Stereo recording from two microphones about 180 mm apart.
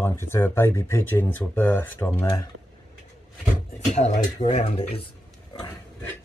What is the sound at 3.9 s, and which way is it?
Speech, 40° left (ahead or behind).